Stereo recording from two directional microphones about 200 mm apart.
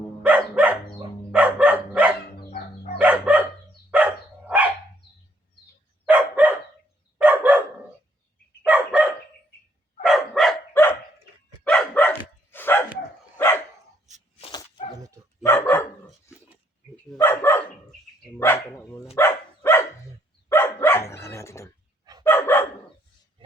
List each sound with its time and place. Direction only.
0.2 s dog: 5° right (ahead or behind)
2.3 s fowl: 50° left (ahead or behind)
3.0 s dog: 10° right (ahead or behind)
6.1 s dog: 5° right (ahead or behind)
8.6 s dog: 5° right (ahead or behind)
11.6 s dog: 5° left (ahead or behind)
14.4 s dog: 25° left (ahead or behind)
14.9 s dog: 15° right (ahead or behind)
15.4 s dog: 10° left (ahead or behind)
16.3 s pig: 15° left (ahead or behind)
17.0 s dog: 10° left (ahead or behind)